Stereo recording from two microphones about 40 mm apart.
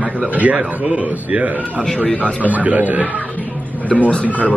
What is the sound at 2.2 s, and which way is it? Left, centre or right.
Speech, right.